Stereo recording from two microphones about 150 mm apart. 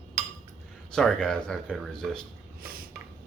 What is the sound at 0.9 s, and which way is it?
Speech, 5° left (ahead or behind).